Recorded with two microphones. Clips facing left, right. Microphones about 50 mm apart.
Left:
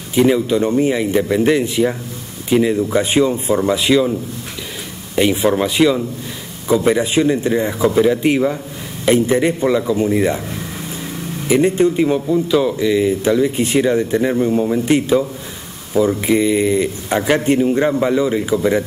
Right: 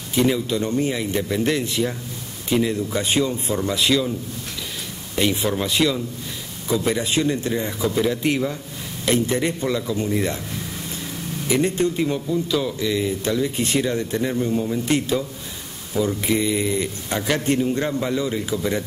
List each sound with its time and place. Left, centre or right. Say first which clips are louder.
0.1 s speech: left 6 dB; centre
5.1 s speech: left 7 dB; centre